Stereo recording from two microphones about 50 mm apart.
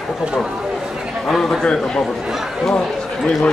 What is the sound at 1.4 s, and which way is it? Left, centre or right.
Speech, centre.